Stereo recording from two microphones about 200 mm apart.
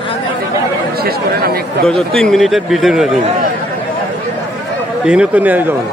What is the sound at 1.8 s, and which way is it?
A man's voice, centre (ahead or behind).